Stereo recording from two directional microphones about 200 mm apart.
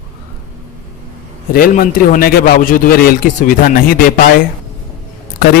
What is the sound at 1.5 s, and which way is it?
A man's voice, 45° left (ahead or behind).